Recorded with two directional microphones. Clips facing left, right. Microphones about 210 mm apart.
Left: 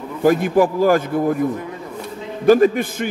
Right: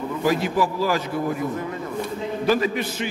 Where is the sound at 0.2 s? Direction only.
50° left (ahead or behind).